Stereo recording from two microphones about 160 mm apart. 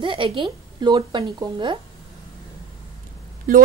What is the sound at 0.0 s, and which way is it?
Speech, 30° right (ahead or behind).